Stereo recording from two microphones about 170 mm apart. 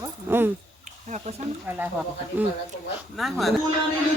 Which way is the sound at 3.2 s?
Centre (ahead or behind).